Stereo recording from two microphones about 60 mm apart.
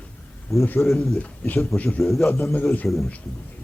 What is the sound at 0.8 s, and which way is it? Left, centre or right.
Speech, centre.